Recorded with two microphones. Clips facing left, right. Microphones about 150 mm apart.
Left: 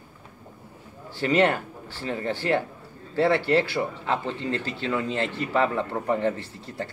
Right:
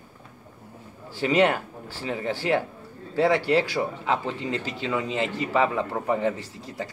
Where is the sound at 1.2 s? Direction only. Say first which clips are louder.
Even; 10° right (ahead or behind).